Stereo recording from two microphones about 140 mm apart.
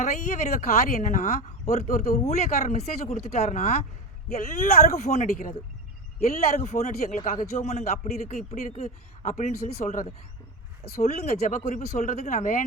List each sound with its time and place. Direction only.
0.0 s speech: 60° left (ahead or behind)
4.3 s speech: 60° left (ahead or behind)
6.2 s speech: 60° left (ahead or behind)
7.5 s speech: 55° left (ahead or behind)
9.8 s speech: 70° left (ahead or behind)
10.8 s speech: 90° left
11.1 s speech: 55° left (ahead or behind)